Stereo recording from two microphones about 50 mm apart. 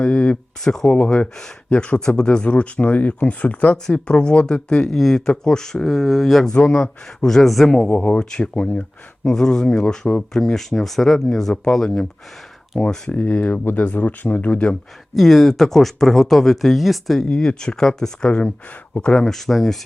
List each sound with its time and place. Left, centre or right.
0.0 s a sound: left
0.6 s speech: centre
0.9 s speech: left; by 6.5 s centre
6.5 s speech: left
8.5 s speech: left
9.2 s speech: centre
10.4 s speech: centre
13.1 s speech: left
15.1 s speech: centre
17.2 s speech: centre
19.1 s speech: centre